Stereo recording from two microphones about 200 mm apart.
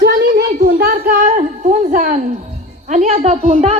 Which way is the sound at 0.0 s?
50° right (ahead or behind).